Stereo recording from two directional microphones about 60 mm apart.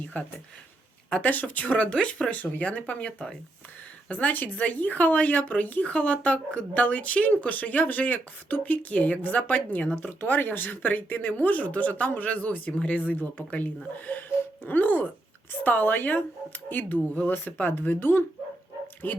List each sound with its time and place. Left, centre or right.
0.1 s speech: left